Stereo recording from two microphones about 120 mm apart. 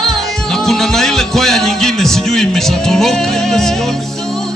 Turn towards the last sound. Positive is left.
turn(degrees=5)  # may be behind; listen again after turning